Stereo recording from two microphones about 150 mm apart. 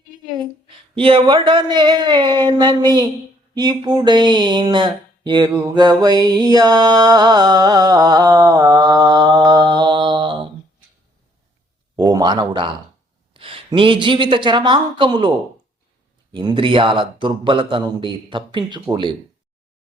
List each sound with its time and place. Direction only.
0.9 s speech: 35° right (ahead or behind)
5.7 s music: 30° right (ahead or behind)
11.9 s speech: 30° right (ahead or behind)
16.3 s a man's voice: 30° right (ahead or behind)